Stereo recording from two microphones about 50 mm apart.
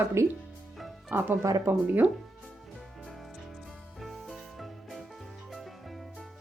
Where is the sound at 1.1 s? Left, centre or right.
Right.